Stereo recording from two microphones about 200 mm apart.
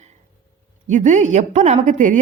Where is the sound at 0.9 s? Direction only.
35° right (ahead or behind).